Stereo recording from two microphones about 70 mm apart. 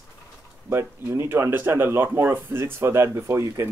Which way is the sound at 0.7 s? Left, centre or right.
Right.